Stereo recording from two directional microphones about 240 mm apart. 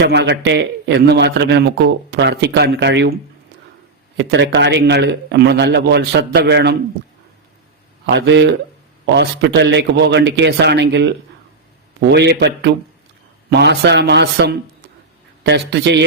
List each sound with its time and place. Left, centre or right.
0.0 s a man's voice: right
4.2 s a man's voice: right
8.0 s a man's voice: right